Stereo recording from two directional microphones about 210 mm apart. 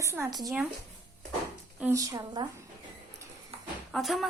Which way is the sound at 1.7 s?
10° right (ahead or behind).